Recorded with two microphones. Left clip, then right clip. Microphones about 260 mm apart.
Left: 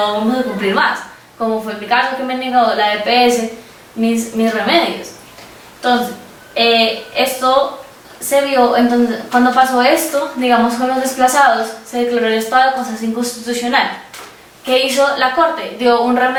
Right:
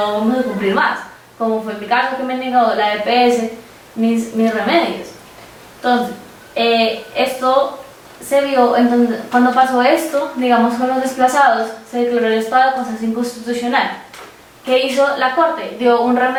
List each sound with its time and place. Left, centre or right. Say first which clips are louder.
0.0 s a woman's voice: left 1 dB; centre
1.4 s a woman's voice: even; right
1.6 s a woman's voice: left 1 dB; centre
13.2 s a woman's voice: left 1 dB; centre